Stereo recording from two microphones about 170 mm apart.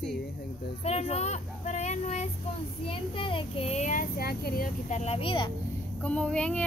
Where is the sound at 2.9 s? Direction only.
30° left (ahead or behind).